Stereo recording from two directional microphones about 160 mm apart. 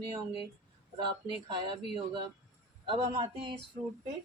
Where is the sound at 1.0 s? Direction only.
30° right (ahead or behind).